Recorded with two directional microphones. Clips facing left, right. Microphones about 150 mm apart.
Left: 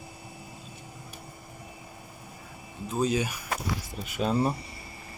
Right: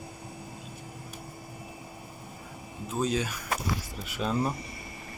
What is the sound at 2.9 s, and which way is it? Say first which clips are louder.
Speech: left 2 dB; 5° left (ahead or behind).